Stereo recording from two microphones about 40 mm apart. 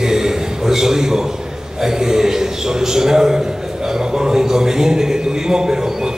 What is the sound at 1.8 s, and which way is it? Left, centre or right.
A man's voice, centre.